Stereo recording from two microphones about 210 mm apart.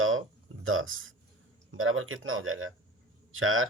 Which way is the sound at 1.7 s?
75° right (ahead or behind).